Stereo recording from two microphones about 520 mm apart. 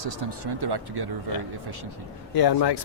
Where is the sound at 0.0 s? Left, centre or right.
Right.